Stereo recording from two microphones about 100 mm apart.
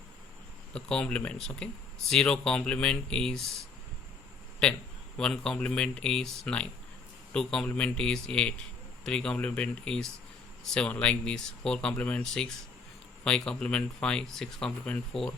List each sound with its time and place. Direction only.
0.7 s speech: 10° left (ahead or behind)
5.1 s speech: 5° left (ahead or behind)